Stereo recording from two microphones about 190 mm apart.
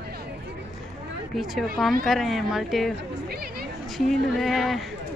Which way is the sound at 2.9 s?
55° right (ahead or behind).